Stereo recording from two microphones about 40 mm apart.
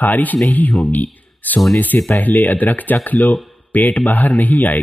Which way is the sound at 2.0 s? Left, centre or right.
Left.